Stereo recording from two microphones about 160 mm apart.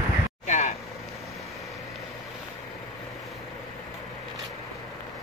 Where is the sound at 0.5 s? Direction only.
50° left (ahead or behind).